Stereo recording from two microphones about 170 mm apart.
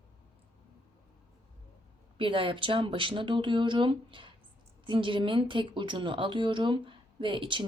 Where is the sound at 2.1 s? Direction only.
30° right (ahead or behind).